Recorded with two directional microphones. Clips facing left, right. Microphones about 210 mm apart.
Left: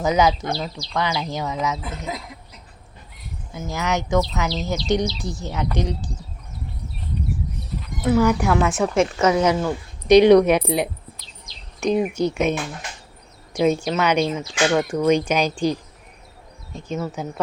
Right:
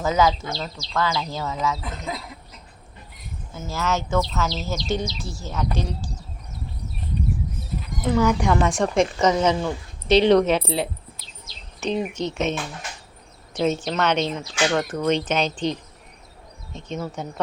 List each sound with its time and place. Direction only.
0.0 s speech: 20° left (ahead or behind)
3.5 s speech: 15° left (ahead or behind)
7.6 s speech: 5° left (ahead or behind)